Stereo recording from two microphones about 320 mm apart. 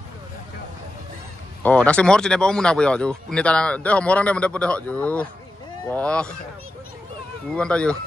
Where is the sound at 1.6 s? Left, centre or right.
Centre.